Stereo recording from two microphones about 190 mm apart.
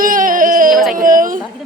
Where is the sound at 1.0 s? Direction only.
45° right (ahead or behind).